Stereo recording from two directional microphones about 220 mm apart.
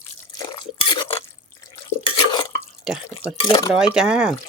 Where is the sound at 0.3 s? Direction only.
20° left (ahead or behind).